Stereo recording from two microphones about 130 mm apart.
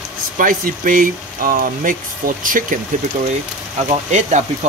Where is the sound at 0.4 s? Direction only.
90° right.